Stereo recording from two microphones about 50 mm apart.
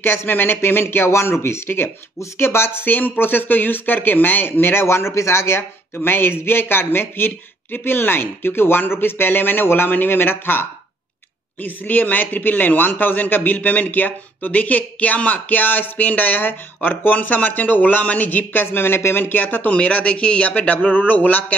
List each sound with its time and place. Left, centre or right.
0.0 s speech: left
1.1 s speech: left
4.8 s speech: left
5.6 s a man's voice: left
19.7 s a man's voice: left